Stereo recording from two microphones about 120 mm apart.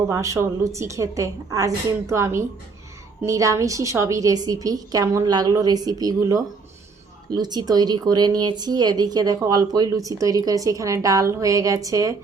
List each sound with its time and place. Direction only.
0.1 s a woman's voice: 25° right (ahead or behind)